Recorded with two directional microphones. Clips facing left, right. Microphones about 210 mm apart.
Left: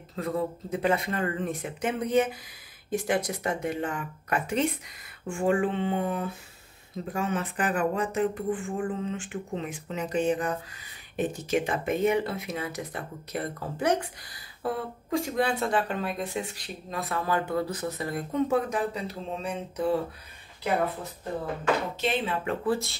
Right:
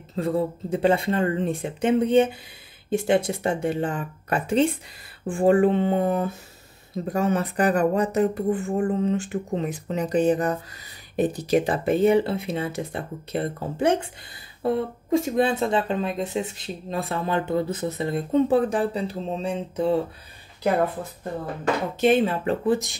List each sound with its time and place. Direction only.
0.1 s speech: 30° right (ahead or behind)
22.0 s speech: 45° right (ahead or behind)
22.7 s speech: 15° right (ahead or behind)